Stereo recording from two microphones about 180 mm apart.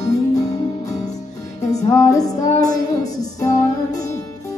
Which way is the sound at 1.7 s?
20° left (ahead or behind).